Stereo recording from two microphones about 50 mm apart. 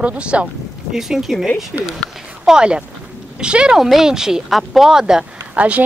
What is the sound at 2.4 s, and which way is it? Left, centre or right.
Speech, centre.